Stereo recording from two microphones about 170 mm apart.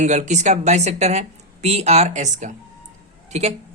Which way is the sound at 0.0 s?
40° right (ahead or behind).